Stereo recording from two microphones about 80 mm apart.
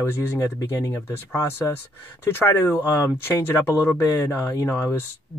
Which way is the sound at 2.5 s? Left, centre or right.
Left.